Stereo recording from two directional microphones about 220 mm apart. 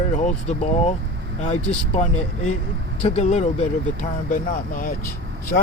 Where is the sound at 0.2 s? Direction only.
30° left (ahead or behind).